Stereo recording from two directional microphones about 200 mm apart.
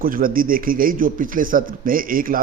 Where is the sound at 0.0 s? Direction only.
45° right (ahead or behind).